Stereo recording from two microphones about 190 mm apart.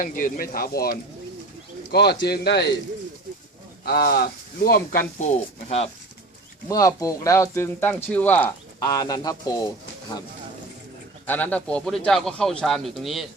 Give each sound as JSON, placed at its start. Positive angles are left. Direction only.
{"t": 0.0, "sound": "speech", "side_deg": 45}
{"t": 3.8, "sound": "speech", "side_deg": 55}
{"t": 5.6, "sound": "speech", "side_deg": 35}
{"t": 6.7, "sound": "speech", "side_deg": 15}
{"t": 11.3, "sound": "a man's voice", "side_deg": 10}